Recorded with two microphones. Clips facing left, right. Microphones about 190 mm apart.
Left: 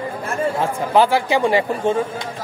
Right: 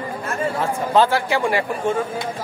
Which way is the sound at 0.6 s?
15° left (ahead or behind).